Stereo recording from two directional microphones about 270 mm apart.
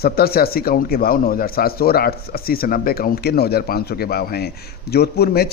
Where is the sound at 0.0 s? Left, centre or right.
Left.